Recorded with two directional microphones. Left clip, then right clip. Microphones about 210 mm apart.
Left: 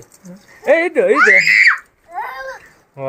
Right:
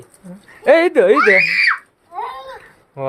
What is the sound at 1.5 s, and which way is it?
Speech, 35° left (ahead or behind).